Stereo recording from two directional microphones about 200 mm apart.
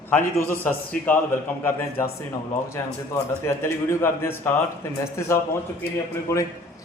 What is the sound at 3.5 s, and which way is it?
A man's voice, 15° left (ahead or behind).